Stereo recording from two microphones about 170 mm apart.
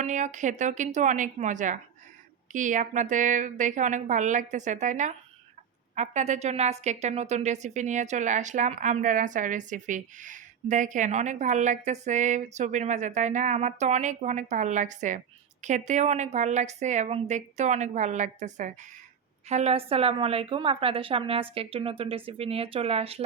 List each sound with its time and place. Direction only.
0.0 s a woman's voice: 45° right (ahead or behind)